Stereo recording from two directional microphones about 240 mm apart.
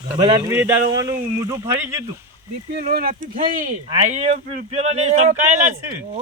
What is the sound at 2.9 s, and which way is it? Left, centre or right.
Speech, right.